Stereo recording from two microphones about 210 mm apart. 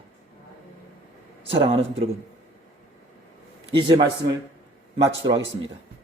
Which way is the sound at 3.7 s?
20° right (ahead or behind).